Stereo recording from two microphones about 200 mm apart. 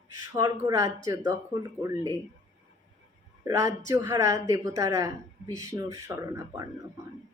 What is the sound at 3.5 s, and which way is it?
Speech, 15° right (ahead or behind).